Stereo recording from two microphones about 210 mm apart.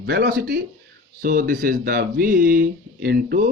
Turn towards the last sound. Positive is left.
turn(degrees=-45)  # may be behind; listen again after turning